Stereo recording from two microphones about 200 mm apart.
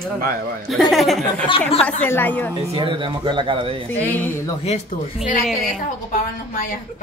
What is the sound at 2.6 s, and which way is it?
Speech, 25° right (ahead or behind).